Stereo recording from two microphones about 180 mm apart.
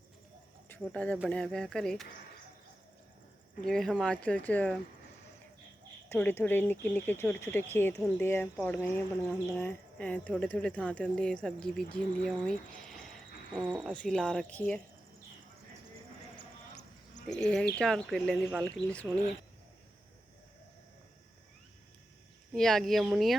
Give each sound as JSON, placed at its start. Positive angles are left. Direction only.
{"t": 0.8, "sound": "speech", "side_deg": 5}
{"t": 3.6, "sound": "speech", "side_deg": 5}
{"t": 6.1, "sound": "speech", "side_deg": 10}
{"t": 13.9, "sound": "speech", "side_deg": 5}
{"t": 17.2, "sound": "speech", "side_deg": 5}
{"t": 18.4, "sound": "speech", "side_deg": -20}
{"t": 22.5, "sound": "speech", "side_deg": 0}